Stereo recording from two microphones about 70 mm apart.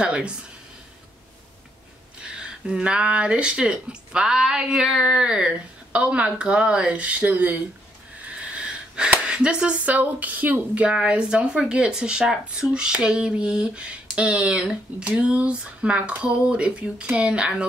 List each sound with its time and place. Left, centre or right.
0.0 s speech: centre
2.2 s speech: centre
8.4 s wheeze: centre
9.3 s speech: centre